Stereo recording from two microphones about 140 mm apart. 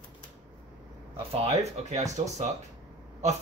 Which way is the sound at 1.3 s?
45° right (ahead or behind).